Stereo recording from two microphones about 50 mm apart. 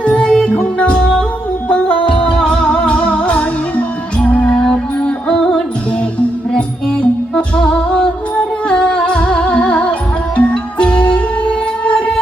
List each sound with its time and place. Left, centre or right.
0.0 s music: centre
0.5 s music: left
2.1 s music: centre
6.5 s music: centre